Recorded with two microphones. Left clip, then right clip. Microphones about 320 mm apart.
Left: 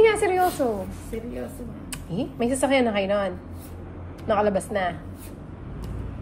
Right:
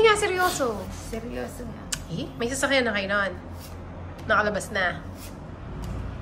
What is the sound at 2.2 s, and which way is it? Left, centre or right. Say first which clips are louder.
Speech: left 5 dB; centre.